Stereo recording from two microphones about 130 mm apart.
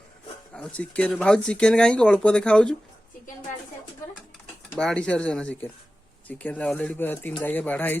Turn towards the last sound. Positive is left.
turn(degrees=15)  # may be behind; listen again after turning